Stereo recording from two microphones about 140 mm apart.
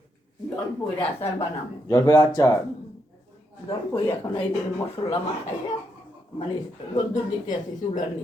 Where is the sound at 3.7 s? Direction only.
25° left (ahead or behind).